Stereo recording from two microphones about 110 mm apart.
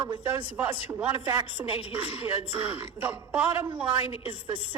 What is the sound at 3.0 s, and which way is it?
Speech, 15° right (ahead or behind).